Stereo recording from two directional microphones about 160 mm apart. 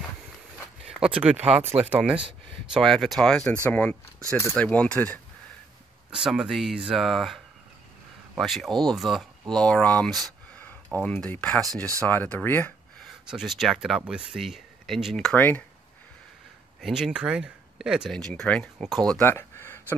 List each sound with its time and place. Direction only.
0.8 s a sound: 5° right (ahead or behind)
1.3 s speech: 40° right (ahead or behind)
2.7 s speech: centre (ahead or behind)
6.1 s speech: 5° right (ahead or behind); by 12.7 s 10° left (ahead or behind)
13.0 s speech: centre (ahead or behind)
16.8 s speech: centre (ahead or behind)
19.0 s a sound: 10° left (ahead or behind)